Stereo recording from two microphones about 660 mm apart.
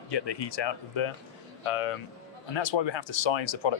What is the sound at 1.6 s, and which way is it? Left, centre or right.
Speech, left.